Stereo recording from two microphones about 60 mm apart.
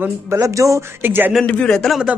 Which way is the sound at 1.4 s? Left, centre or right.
Left.